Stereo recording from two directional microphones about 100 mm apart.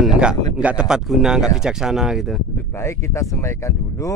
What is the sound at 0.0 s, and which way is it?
A man's voice, 5° right (ahead or behind).